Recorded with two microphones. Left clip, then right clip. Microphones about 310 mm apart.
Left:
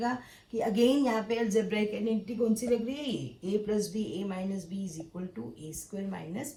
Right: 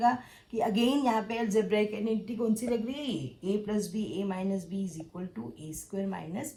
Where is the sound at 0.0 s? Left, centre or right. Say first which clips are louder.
Right 7 dB; centre.